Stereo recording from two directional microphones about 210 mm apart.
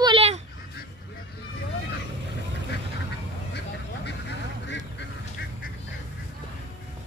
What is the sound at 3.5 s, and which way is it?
Duck, 55° left (ahead or behind).